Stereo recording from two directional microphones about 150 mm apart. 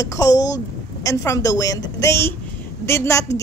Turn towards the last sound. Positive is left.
turn(degrees=20)  # may be behind; listen again after turning